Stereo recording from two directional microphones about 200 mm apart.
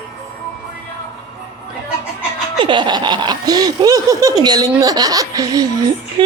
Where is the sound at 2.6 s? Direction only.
25° right (ahead or behind).